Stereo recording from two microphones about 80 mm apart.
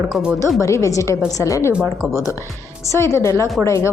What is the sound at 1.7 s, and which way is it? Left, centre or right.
Speech, right.